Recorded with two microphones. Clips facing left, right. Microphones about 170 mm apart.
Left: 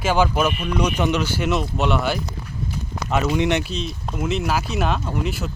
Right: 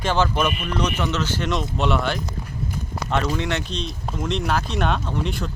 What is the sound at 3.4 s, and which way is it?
Speech, 15° left (ahead or behind).